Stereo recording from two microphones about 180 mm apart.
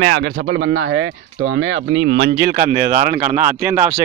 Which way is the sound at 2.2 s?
65° right (ahead or behind).